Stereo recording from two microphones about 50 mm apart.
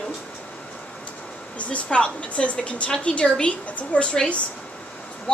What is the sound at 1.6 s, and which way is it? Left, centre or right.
A woman's voice, left.